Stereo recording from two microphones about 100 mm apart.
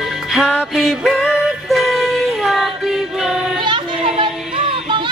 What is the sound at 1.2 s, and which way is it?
Female singing, centre (ahead or behind).